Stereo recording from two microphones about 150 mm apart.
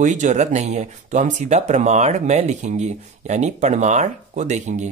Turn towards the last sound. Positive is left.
turn(degrees=-50)  # may be behind; listen again after turning